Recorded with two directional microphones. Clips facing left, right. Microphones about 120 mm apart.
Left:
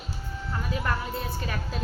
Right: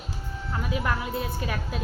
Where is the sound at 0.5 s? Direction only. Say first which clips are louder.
Right 2 dB; centre (ahead or behind).